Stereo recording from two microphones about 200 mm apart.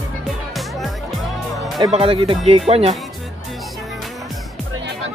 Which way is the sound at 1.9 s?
25° right (ahead or behind).